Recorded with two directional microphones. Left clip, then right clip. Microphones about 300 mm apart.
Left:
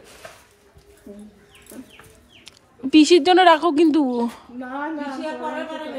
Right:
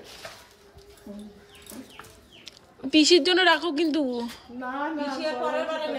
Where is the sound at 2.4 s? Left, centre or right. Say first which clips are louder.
Left 5 dB; centre.